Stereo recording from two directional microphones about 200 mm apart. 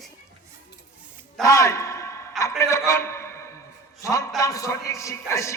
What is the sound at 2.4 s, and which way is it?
A man's voice, 15° left (ahead or behind).